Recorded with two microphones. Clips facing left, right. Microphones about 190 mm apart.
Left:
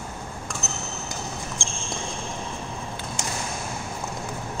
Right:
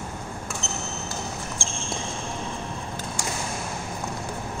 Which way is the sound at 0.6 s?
5° left (ahead or behind).